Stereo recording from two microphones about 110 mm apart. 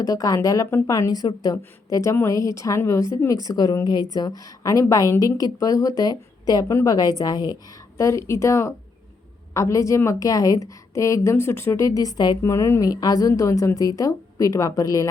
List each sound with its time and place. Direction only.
0.0 s a woman's voice: 30° left (ahead or behind)